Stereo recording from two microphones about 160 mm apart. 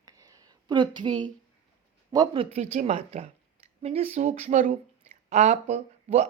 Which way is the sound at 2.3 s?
45° right (ahead or behind).